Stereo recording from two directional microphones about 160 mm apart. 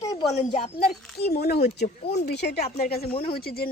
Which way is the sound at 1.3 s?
80° left.